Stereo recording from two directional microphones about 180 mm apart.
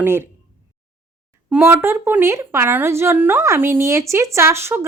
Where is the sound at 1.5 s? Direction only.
15° right (ahead or behind).